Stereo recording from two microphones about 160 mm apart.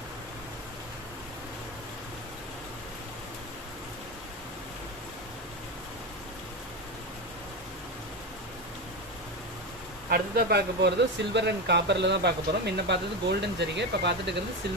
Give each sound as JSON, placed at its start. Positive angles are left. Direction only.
{"t": 10.1, "sound": "speech", "side_deg": -80}